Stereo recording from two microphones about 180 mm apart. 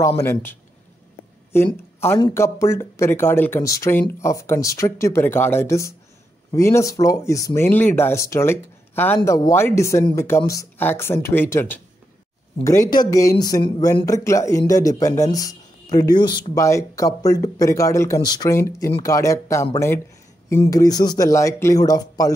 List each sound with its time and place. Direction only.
0.2 s speech: 10° left (ahead or behind)
2.3 s speech: 15° left (ahead or behind)